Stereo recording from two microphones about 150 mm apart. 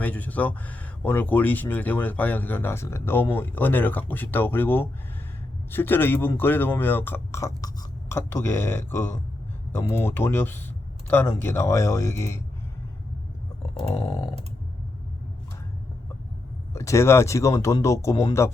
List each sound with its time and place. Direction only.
0.0 s speech: 10° left (ahead or behind)
13.6 s a sound: 45° left (ahead or behind)
16.7 s speech: 20° left (ahead or behind)